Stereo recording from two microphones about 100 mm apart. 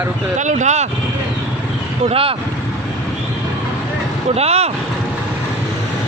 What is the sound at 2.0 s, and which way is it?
Speech, 70° right (ahead or behind).